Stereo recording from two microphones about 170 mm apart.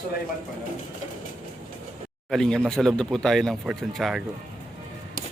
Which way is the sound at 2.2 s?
Centre (ahead or behind).